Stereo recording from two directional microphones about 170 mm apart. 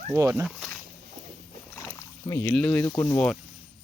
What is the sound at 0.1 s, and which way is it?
Speech, 15° right (ahead or behind).